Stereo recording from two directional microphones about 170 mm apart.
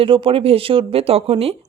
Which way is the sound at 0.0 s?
30° right (ahead or behind).